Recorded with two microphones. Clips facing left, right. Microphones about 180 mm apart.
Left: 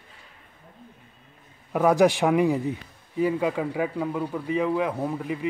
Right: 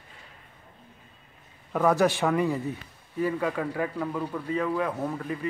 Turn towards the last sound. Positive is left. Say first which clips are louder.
# left 2 dB
turn(degrees=10)  # may be behind; listen again after turning